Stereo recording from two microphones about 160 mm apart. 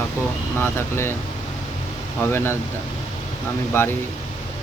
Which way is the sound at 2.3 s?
15° left (ahead or behind).